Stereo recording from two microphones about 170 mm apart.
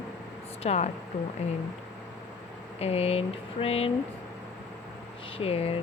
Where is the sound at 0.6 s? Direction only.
40° left (ahead or behind).